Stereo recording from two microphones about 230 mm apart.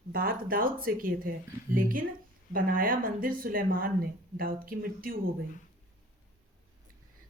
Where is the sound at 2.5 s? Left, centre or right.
Right.